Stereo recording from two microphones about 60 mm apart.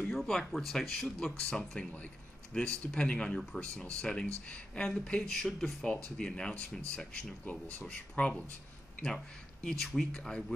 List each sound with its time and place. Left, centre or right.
0.1 s speech: centre